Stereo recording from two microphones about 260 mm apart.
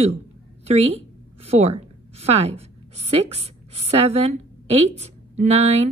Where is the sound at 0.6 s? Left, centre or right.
Right.